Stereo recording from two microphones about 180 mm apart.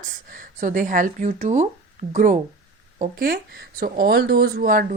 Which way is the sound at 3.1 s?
55° right (ahead or behind).